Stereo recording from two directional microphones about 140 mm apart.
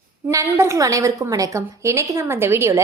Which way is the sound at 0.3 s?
20° right (ahead or behind).